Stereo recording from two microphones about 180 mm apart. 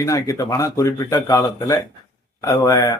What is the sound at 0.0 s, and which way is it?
A man's voice, 20° left (ahead or behind).